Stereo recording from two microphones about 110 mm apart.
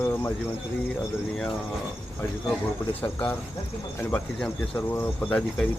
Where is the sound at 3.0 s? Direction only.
15° left (ahead or behind).